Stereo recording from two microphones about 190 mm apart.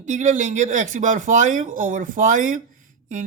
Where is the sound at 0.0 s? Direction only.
40° right (ahead or behind).